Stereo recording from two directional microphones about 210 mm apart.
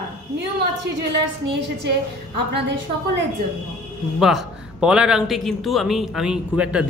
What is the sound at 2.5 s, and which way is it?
Speech, 55° right (ahead or behind).